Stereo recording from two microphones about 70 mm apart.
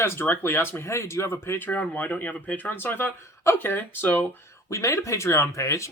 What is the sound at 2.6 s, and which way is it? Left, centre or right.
Speech, left.